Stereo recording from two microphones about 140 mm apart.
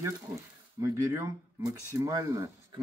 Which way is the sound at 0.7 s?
20° right (ahead or behind).